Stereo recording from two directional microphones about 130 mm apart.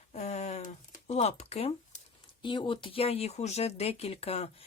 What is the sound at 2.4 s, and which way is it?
Speech, 40° left (ahead or behind).